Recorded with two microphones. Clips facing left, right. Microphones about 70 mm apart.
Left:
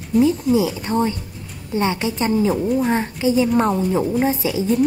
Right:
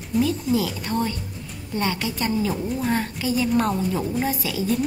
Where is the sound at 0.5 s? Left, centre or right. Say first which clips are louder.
Left 5 dB; centre.